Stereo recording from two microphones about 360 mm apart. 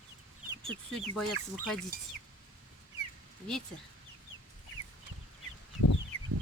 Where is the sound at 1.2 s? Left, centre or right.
Centre.